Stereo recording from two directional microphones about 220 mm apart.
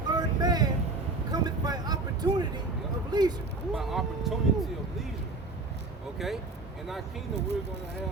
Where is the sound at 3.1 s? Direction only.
20° right (ahead or behind).